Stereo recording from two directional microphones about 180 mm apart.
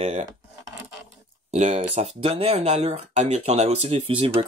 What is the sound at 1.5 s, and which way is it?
Speech, 40° right (ahead or behind).